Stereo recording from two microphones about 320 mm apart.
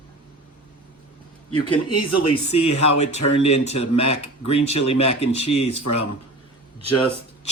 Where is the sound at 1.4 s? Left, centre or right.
Left.